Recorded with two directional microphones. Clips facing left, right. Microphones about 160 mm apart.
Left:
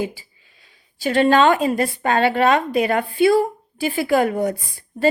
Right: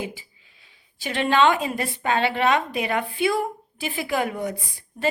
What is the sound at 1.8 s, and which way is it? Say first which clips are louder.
A woman's voice: left 5 dB; 45° left (ahead or behind).